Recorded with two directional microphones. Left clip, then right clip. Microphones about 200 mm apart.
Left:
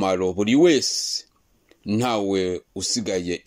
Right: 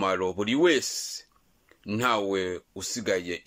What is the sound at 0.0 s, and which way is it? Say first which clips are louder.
Speech: left 5 dB; 20° left (ahead or behind).